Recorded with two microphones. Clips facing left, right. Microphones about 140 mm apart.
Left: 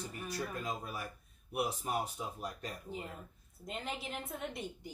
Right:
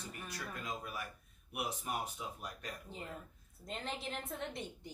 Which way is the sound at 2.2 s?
35° left (ahead or behind).